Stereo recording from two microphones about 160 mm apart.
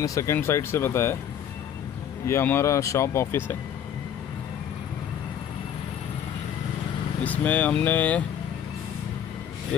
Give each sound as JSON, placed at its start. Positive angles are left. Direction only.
{"t": 0.0, "sound": "speech", "side_deg": 20}
{"t": 2.2, "sound": "speech", "side_deg": 15}
{"t": 7.2, "sound": "speech", "side_deg": 10}